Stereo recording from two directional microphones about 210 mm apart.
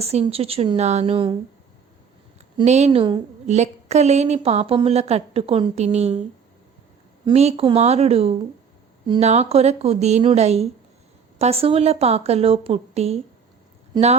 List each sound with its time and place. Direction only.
0.0 s a woman's voice: 30° right (ahead or behind)
2.6 s a woman's voice: 30° right (ahead or behind)
7.3 s a woman's voice: 30° right (ahead or behind)